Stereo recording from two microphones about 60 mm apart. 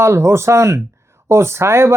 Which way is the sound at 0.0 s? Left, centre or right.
Right.